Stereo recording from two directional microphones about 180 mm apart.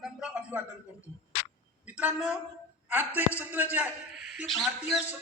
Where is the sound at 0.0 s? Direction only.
5° right (ahead or behind).